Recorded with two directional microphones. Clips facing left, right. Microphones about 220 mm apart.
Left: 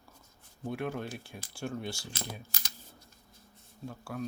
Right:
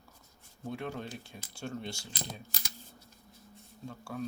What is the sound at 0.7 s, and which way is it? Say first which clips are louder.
Speech: left 3 dB; 5° left (ahead or behind).